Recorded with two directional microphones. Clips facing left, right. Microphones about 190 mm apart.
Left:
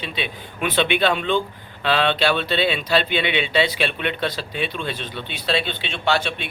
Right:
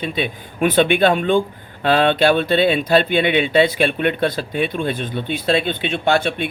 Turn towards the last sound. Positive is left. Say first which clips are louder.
# right 5 dB
turn(degrees=-50)  # may be behind; listen again after turning